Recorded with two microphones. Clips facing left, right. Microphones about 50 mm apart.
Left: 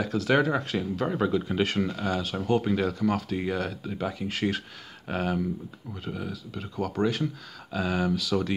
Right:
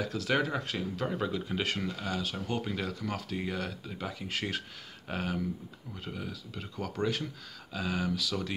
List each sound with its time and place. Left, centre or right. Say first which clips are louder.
0.2 s speech: left 7 dB; centre